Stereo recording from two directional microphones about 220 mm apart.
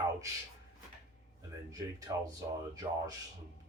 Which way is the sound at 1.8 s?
15° right (ahead or behind).